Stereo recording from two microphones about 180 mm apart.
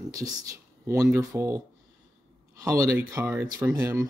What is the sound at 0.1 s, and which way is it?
Speech, 20° right (ahead or behind).